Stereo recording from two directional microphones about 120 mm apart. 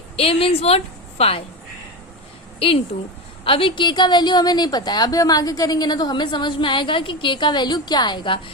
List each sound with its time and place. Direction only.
0.2 s a woman's voice: 50° left (ahead or behind)
2.9 s a woman's voice: 60° left (ahead or behind)
3.4 s a woman's voice: 50° left (ahead or behind)